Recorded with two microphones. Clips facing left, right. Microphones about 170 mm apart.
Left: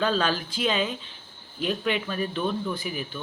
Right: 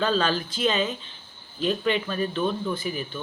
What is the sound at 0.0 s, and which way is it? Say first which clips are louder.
Speech: right 1 dB; 10° left (ahead or behind).